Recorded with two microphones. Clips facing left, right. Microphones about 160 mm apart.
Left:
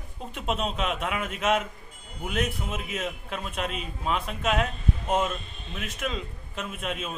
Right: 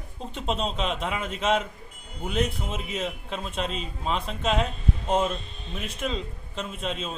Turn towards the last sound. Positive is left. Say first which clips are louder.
# right 1 dB
turn(degrees=-30)  # may be behind; listen again after turning